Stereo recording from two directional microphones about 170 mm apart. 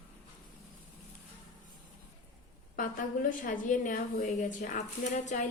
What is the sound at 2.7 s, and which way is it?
A woman's voice, 55° left (ahead or behind).